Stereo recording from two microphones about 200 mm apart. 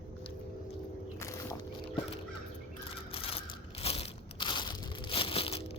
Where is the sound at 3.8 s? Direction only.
30° left (ahead or behind).